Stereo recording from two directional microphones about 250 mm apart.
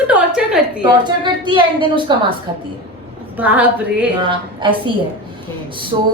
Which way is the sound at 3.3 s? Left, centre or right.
Centre.